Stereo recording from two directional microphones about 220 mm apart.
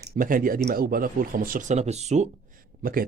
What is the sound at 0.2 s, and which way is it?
Speech, 40° right (ahead or behind).